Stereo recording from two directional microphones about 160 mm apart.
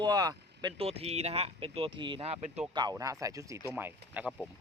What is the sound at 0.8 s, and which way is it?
Speech, 40° right (ahead or behind).